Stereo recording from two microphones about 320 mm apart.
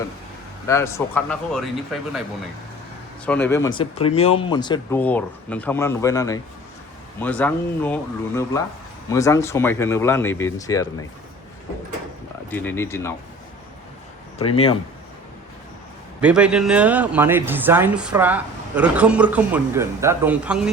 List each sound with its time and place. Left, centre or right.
0.7 s speech: centre
3.2 s speech: centre
9.0 s speech: centre
12.5 s speech: centre
14.3 s speech: centre
16.2 s speech: centre